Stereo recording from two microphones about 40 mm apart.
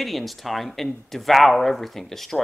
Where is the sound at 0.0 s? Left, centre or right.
Centre.